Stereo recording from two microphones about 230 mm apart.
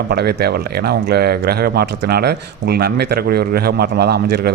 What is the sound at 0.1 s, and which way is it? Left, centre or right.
Speech, right.